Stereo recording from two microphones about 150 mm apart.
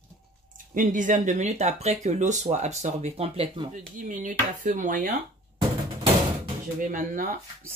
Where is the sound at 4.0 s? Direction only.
60° right (ahead or behind).